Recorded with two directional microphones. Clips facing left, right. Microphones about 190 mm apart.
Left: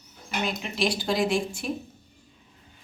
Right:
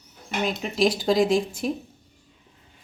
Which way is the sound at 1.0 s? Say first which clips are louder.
Right 4 dB; 35° right (ahead or behind).